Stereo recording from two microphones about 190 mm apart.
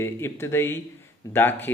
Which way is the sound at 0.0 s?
15° left (ahead or behind).